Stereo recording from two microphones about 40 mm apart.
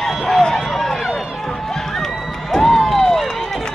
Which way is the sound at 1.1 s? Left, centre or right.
Centre.